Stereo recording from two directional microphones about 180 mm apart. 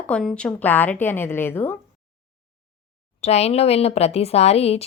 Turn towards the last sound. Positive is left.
turn(degrees=35)  # may be behind; listen again after turning